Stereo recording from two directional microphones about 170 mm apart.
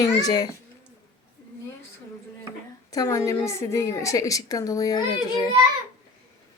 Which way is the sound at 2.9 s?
20° left (ahead or behind).